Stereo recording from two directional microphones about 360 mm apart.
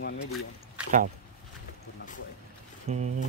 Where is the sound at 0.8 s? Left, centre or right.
Centre.